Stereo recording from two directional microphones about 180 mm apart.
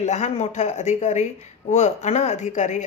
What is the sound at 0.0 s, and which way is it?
Speech, 40° left (ahead or behind).